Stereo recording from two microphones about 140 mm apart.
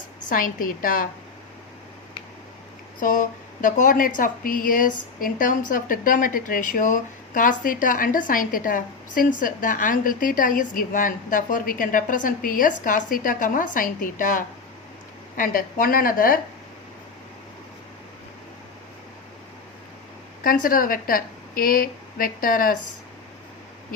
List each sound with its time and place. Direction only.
0.3 s a woman's voice: 80° left
3.0 s a woman's voice: 70° left (ahead or behind)
15.4 s a woman's voice: 90° left
20.4 s a woman's voice: 90° left